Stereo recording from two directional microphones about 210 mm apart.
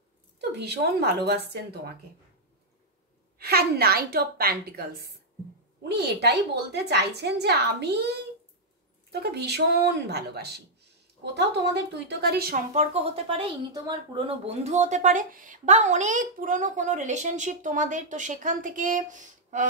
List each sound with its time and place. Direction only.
0.4 s a woman's voice: 50° right (ahead or behind)
3.3 s a woman's voice: 50° right (ahead or behind)
12.7 s speech: 30° right (ahead or behind)